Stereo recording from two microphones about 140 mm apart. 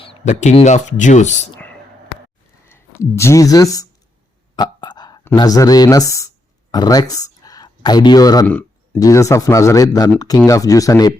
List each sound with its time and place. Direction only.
0.3 s speech: 55° left (ahead or behind)
2.6 s speech: 20° left (ahead or behind)
4.5 s a sound: 30° left (ahead or behind)
5.2 s speech: 25° left (ahead or behind)
8.4 s a sound: 10° left (ahead or behind)
9.0 s speech: 25° left (ahead or behind)